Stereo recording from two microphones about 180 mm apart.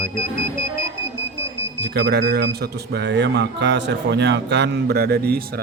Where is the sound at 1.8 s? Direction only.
70° right (ahead or behind).